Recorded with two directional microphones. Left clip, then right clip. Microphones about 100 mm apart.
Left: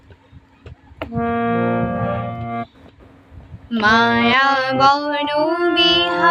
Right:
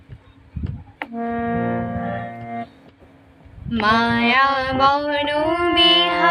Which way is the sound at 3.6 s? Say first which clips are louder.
Left 3 dB; 40° left (ahead or behind).